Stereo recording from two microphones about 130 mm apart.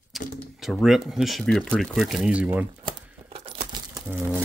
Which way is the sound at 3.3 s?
50° right (ahead or behind).